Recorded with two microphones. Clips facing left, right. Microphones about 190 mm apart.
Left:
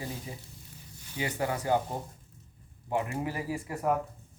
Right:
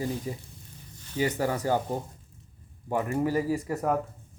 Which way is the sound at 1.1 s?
40° right (ahead or behind).